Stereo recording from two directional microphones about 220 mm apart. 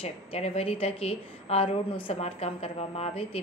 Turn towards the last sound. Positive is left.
turn(degrees=25)  # may be behind; listen again after turning